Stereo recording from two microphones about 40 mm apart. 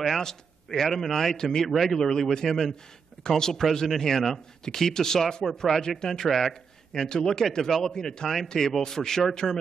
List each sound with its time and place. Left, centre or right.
0.2 s speech: centre
1.7 s speech: centre
6.2 s speech: centre
7.1 s speech: centre